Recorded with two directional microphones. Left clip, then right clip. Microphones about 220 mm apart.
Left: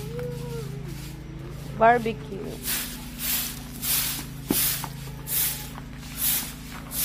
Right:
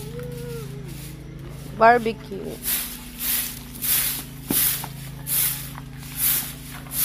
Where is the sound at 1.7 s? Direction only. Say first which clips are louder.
Right 3 dB; 25° right (ahead or behind).